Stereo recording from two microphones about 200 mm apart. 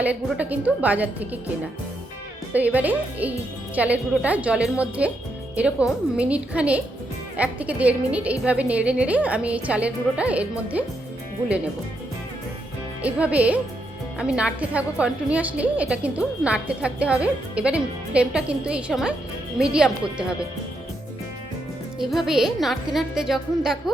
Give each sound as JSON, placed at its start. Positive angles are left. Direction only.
{"t": 0.0, "sound": "a woman's voice", "side_deg": -5}
{"t": 2.5, "sound": "a woman's voice", "side_deg": -5}
{"t": 6.1, "sound": "a woman's voice", "side_deg": -5}
{"t": 13.0, "sound": "a woman's voice", "side_deg": -5}
{"t": 21.9, "sound": "a woman's voice", "side_deg": 0}